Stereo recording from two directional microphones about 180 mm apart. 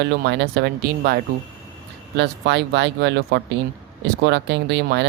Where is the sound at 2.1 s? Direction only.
70° right (ahead or behind).